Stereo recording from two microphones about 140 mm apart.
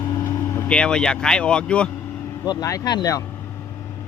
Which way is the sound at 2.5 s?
25° left (ahead or behind).